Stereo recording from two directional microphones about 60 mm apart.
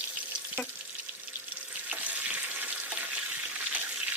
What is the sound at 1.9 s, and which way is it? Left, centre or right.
Frying, right.